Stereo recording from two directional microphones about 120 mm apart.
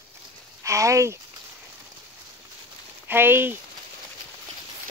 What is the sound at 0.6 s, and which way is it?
Speech, 25° right (ahead or behind).